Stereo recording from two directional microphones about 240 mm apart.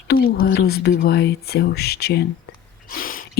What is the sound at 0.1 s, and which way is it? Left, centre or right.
Speech, left.